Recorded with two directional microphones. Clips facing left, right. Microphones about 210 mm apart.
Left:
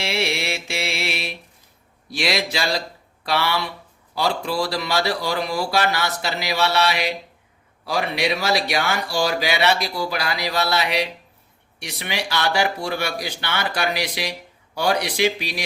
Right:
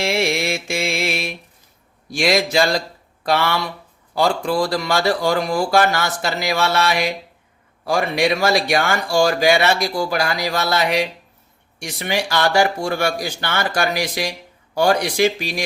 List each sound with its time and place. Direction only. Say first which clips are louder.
0.0 s mantra: right 5 dB; 50° right (ahead or behind)
2.0 s speech: right 5 dB; 45° right (ahead or behind)